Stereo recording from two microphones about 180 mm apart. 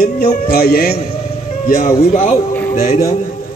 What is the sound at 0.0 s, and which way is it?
Music, 60° left (ahead or behind).